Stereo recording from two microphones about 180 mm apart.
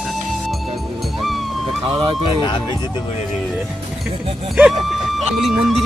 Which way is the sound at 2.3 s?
25° left (ahead or behind).